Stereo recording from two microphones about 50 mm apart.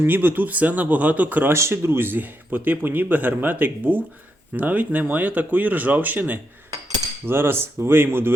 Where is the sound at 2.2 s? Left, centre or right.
Right.